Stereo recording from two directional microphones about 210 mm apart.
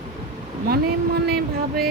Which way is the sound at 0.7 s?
50° right (ahead or behind).